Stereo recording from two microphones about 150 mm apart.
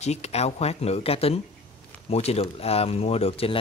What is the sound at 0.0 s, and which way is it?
Speech, 45° left (ahead or behind).